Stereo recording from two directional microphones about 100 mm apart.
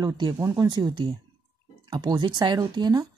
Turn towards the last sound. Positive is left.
turn(degrees=-45)  # may be behind; listen again after turning